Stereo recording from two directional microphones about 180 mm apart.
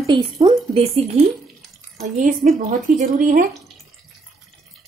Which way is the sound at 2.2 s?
45° right (ahead or behind).